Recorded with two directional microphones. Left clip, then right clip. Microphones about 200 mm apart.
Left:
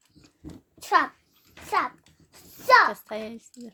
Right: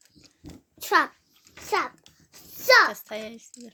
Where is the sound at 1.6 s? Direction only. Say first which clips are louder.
Left 1 dB; 45° right (ahead or behind).